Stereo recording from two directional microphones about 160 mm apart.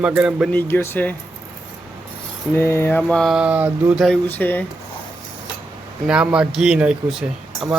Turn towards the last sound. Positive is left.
turn(degrees=0)  # may be behind; listen again after turning